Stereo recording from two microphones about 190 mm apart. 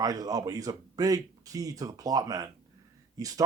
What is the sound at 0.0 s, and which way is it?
Speech, 20° right (ahead or behind).